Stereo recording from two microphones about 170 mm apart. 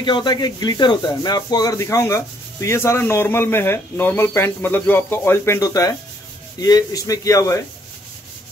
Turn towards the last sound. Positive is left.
turn(degrees=20)  # may be behind; listen again after turning